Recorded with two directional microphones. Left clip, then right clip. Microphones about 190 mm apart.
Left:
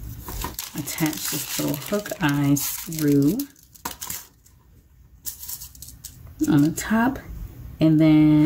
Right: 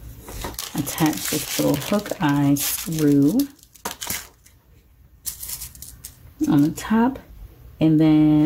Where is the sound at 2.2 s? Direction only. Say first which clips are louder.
Right 2 dB; 25° right (ahead or behind).